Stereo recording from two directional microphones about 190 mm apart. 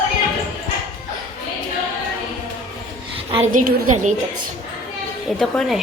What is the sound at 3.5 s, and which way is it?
Speech, 45° right (ahead or behind).